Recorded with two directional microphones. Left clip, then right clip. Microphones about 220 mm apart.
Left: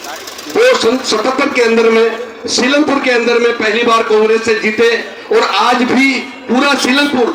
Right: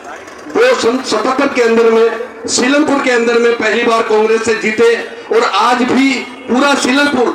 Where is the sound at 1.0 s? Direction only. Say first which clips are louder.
Even; 20° left (ahead or behind).